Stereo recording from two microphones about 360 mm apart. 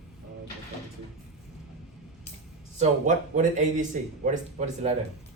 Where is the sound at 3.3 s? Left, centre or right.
Right.